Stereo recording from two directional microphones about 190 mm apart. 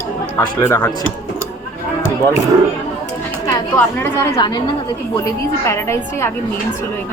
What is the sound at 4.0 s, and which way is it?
Speech, 10° left (ahead or behind).